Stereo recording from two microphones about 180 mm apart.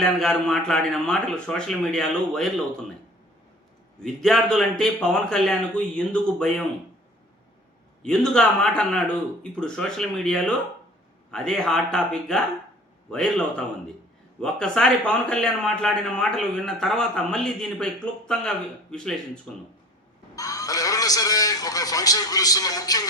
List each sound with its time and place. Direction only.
0.0 s a man's voice: centre (ahead or behind)
4.0 s a man's voice: 5° left (ahead or behind)
8.0 s a man's voice: 5° left (ahead or behind)
14.4 s a man's voice: 5° left (ahead or behind)
20.3 s a man's voice: 20° left (ahead or behind)